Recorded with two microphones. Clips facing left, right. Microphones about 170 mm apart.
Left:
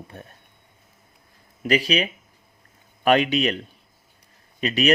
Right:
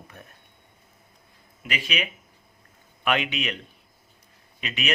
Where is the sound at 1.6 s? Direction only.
40° left (ahead or behind).